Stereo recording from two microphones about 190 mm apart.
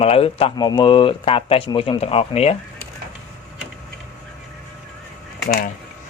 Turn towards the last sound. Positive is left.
turn(degrees=45)  # may be behind; listen again after turning